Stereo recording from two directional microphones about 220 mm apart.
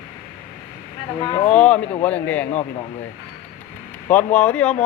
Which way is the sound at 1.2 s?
20° left (ahead or behind).